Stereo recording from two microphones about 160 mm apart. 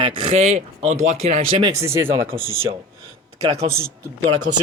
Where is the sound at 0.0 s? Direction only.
40° right (ahead or behind).